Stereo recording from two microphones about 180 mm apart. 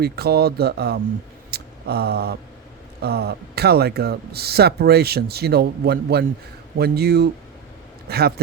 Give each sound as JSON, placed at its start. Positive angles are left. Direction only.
{"t": 0.0, "sound": "speech", "side_deg": -60}
{"t": 1.5, "sound": "a sound", "side_deg": -65}
{"t": 3.0, "sound": "a man's voice", "side_deg": -60}